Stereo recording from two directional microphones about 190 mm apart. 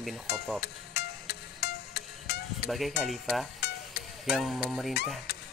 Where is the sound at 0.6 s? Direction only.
60° left (ahead or behind).